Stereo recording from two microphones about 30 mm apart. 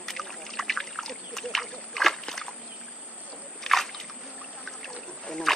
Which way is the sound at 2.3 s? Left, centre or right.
Left.